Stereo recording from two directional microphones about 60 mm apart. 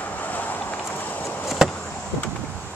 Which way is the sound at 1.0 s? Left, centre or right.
Left.